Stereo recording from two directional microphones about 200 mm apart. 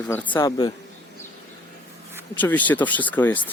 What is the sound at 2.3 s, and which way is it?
Speech, 10° left (ahead or behind).